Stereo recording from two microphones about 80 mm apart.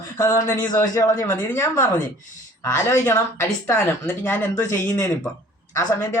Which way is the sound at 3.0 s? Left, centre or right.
Left.